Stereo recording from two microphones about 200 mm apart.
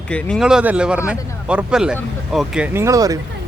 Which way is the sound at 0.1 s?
5° left (ahead or behind).